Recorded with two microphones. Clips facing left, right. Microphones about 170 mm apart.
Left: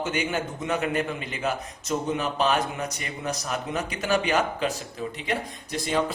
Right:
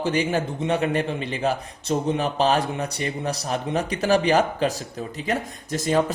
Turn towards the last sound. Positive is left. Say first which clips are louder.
# right 4 dB
turn(degrees=-45)  # may be behind; listen again after turning